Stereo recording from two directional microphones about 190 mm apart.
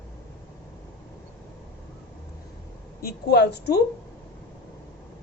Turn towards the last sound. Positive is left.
turn(degrees=60)  # may be behind; listen again after turning